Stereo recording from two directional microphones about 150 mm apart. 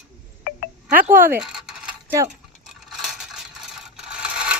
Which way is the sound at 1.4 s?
5° right (ahead or behind).